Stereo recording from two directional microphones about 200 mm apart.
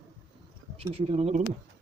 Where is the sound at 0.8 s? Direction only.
30° right (ahead or behind).